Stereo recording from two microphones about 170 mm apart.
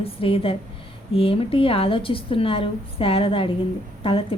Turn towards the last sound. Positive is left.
turn(degrees=35)  # may be behind; listen again after turning